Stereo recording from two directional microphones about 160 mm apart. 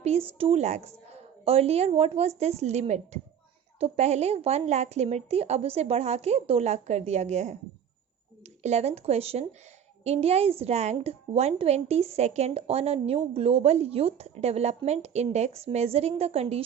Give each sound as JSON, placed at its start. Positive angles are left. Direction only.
{"t": 0.0, "sound": "a woman's voice", "side_deg": -40}
{"t": 8.6, "sound": "a woman's voice", "side_deg": -40}